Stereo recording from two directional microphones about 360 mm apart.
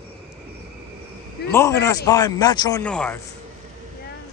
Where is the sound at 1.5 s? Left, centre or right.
Centre.